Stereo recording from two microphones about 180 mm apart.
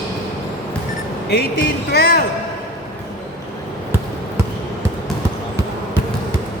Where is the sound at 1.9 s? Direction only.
60° left (ahead or behind).